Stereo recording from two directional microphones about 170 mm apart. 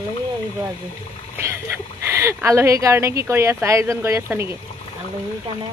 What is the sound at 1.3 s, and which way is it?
Speech, 15° right (ahead or behind).